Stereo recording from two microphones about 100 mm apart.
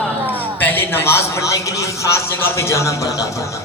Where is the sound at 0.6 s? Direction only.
20° left (ahead or behind).